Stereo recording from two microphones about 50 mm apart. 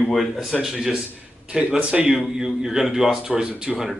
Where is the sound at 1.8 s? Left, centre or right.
Right.